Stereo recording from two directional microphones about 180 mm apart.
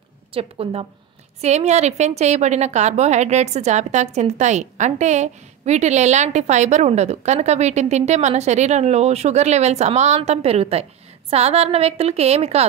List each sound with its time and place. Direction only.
0.3 s a woman's voice: 30° right (ahead or behind)